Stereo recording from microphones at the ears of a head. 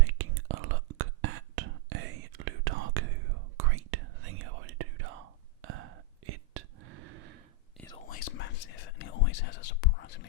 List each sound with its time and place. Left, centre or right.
0.0 s whispering: right
7.9 s whispering: left